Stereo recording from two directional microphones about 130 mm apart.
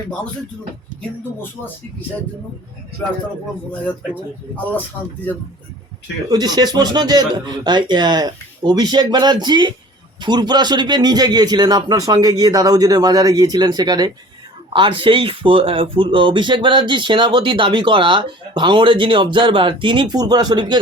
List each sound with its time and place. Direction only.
1.4 s speech: 15° left (ahead or behind)
6.2 s speech: 30° right (ahead or behind)